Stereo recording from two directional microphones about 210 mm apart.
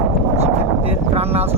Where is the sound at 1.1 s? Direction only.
30° right (ahead or behind).